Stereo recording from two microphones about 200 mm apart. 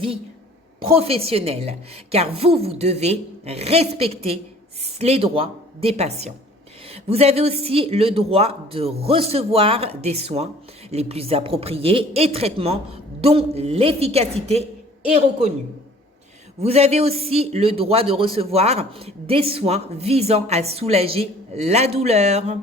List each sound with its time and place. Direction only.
0.9 s speech: 30° right (ahead or behind)
16.6 s speech: 30° right (ahead or behind)